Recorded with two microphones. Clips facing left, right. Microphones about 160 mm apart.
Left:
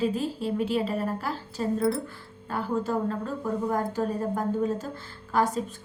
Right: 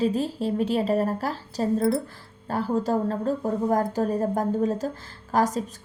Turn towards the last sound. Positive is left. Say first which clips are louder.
# right 2 dB
turn(degrees=-40)  # may be behind; listen again after turning